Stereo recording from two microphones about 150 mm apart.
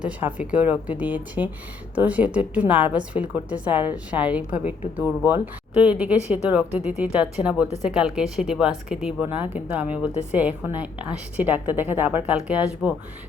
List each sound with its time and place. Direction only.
0.0 s a woman's voice: 10° right (ahead or behind)